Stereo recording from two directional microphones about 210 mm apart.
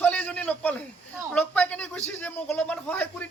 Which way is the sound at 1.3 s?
5° left (ahead or behind).